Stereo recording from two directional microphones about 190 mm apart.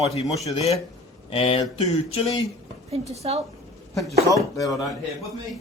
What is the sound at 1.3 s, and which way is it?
Speech, 30° left (ahead or behind).